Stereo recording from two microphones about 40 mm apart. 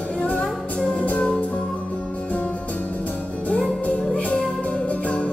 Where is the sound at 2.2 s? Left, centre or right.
Left.